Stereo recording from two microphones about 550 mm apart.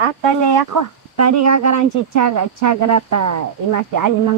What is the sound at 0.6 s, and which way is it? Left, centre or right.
Speech, right.